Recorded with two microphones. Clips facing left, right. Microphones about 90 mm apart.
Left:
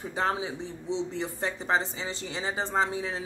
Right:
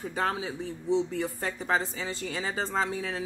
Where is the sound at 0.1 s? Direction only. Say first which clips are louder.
Left 2 dB; 25° left (ahead or behind).